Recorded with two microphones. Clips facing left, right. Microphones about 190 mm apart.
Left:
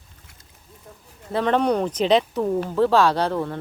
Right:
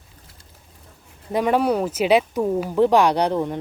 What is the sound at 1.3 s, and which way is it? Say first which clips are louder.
Speech: right 1 dB; 10° right (ahead or behind).